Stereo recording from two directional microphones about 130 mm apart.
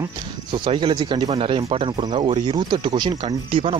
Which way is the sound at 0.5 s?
40° right (ahead or behind).